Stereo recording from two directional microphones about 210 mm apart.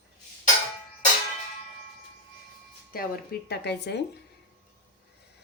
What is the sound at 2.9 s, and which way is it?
Speech, 45° left (ahead or behind).